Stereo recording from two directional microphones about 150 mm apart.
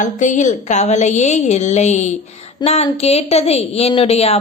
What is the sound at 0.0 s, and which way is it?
A woman's voice, 55° left (ahead or behind).